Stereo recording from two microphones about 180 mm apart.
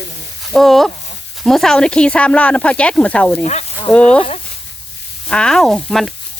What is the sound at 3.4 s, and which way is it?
Speech, 40° left (ahead or behind).